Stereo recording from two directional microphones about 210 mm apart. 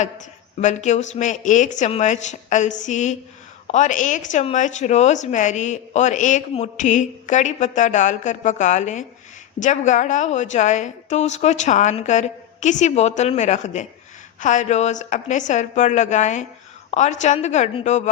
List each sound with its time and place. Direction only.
0.6 s speech: 35° left (ahead or behind)